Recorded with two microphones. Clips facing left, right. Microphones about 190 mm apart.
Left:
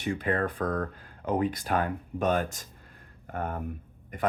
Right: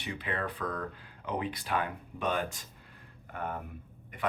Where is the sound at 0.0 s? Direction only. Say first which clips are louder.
Left 8 dB; 45° left (ahead or behind).